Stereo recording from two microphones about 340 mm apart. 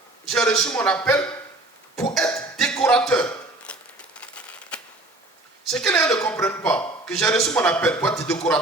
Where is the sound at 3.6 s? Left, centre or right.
Centre.